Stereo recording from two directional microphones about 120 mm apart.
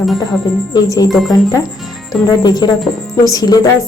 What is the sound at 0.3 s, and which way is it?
Speech, 35° left (ahead or behind).